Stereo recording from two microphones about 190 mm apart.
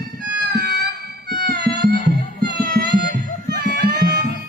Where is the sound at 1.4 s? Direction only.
60° right (ahead or behind).